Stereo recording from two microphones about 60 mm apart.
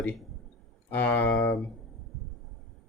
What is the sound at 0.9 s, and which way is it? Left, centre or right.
Speech, left.